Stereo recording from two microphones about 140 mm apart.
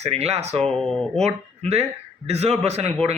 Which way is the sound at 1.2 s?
50° right (ahead or behind).